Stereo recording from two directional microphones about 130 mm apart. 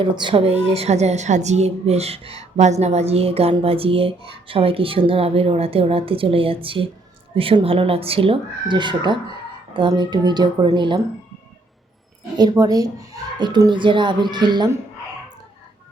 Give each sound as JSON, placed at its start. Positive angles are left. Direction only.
{"t": 0.0, "sound": "a woman's voice", "side_deg": -40}
{"t": 12.4, "sound": "speech", "side_deg": -30}